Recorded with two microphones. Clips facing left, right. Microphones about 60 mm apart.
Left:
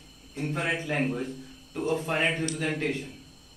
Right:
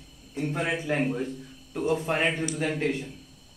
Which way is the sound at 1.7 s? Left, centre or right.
Centre.